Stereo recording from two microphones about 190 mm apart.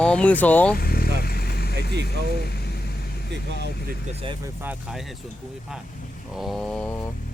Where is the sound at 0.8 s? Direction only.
50° left (ahead or behind).